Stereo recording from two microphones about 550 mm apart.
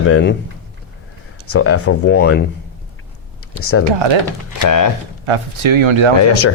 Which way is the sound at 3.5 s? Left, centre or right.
Left.